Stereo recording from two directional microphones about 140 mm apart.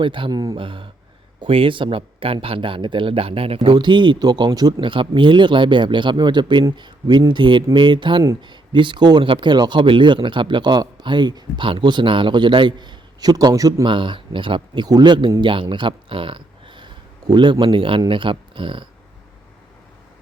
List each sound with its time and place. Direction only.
0.0 s speech: 35° right (ahead or behind)